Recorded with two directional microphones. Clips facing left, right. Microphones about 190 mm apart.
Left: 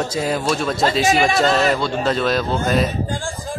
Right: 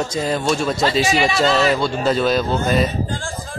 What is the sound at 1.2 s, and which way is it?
Speech, 45° left (ahead or behind).